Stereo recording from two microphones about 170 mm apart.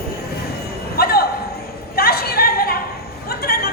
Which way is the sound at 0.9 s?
65° left (ahead or behind).